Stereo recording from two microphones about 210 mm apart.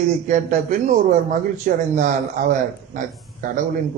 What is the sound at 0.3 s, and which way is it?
A man's voice, 35° right (ahead or behind).